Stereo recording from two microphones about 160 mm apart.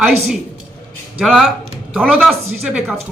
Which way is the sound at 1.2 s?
Centre (ahead or behind).